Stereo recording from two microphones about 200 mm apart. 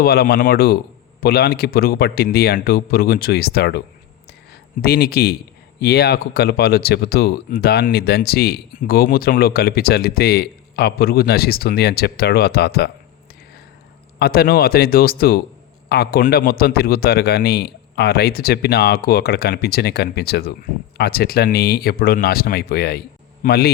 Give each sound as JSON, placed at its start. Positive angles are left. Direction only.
{"t": 0.0, "sound": "a man's voice", "side_deg": 50}
{"t": 14.2, "sound": "a man's voice", "side_deg": 50}